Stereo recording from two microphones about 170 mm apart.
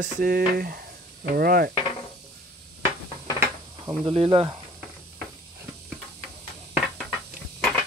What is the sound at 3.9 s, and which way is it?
Speech, 30° right (ahead or behind).